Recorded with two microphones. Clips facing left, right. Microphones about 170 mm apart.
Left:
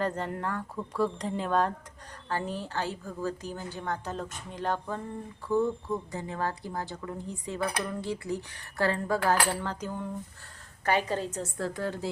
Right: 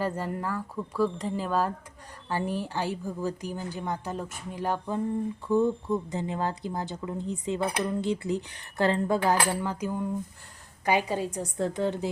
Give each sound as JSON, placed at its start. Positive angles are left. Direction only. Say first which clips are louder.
{"t": 0.0, "sound": "a woman's voice", "louder": "right 1 dB", "side_deg": -5}
{"t": 6.1, "sound": "a woman's voice", "louder": "right 3 dB", "side_deg": -20}